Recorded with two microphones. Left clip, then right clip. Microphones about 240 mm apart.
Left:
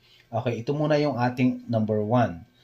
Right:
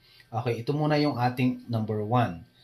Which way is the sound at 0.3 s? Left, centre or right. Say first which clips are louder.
Left 2 dB; left.